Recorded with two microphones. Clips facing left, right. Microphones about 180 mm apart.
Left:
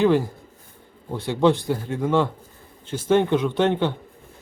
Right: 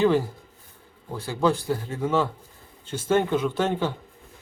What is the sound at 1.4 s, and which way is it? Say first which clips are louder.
Speech: left 4 dB; 25° left (ahead or behind).